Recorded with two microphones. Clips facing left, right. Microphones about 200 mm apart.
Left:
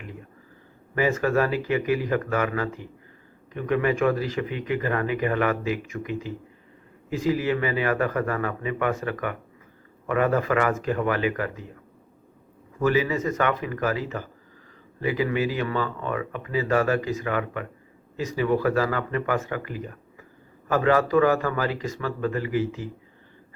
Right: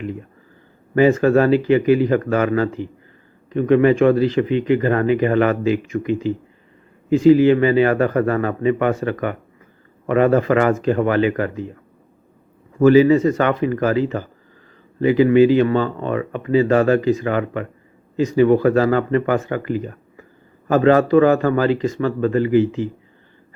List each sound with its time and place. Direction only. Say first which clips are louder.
0.9 s speech: right 9 dB; 30° right (ahead or behind)
12.8 s speech: right 11 dB; 30° right (ahead or behind)